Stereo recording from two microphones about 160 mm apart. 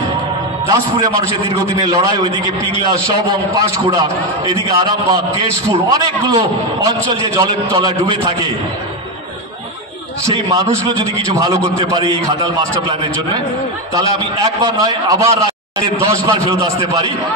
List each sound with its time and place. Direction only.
1.8 s a man's voice: 25° right (ahead or behind)
10.2 s a man's voice: 25° right (ahead or behind)
13.9 s a man's voice: 25° right (ahead or behind)